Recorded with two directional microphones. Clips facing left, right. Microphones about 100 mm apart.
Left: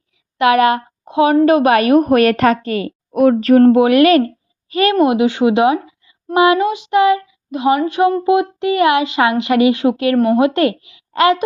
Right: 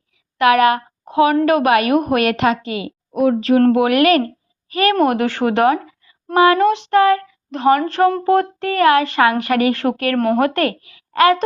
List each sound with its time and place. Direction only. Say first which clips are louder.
0.3 s a woman's voice: left 1 dB; 30° left (ahead or behind); by 3.5 s 60° left (ahead or behind)
3.6 s speech: left 4 dB; 30° left (ahead or behind)
4.9 s speech: left 3 dB; 15° left (ahead or behind)
6.8 s speech: left 1 dB; 15° left (ahead or behind)